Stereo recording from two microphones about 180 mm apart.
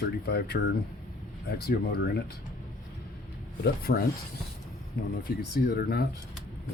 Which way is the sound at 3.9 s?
60° left (ahead or behind).